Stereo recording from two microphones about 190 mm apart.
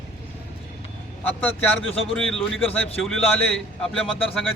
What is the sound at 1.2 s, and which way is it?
Speech, 10° left (ahead or behind).